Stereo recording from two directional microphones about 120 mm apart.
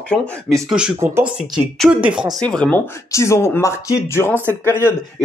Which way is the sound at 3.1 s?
25° left (ahead or behind).